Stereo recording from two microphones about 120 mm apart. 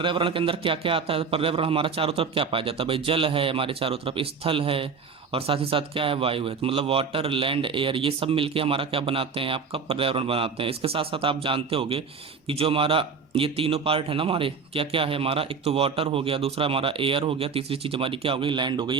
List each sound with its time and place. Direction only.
0.0 s speech: 45° right (ahead or behind)